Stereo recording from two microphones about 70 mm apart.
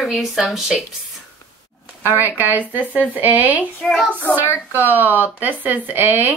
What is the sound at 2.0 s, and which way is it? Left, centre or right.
Speech, right.